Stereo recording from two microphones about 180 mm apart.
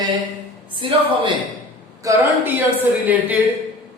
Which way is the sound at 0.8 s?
30° right (ahead or behind).